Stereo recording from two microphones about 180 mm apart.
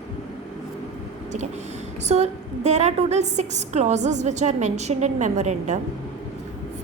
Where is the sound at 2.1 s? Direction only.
40° right (ahead or behind).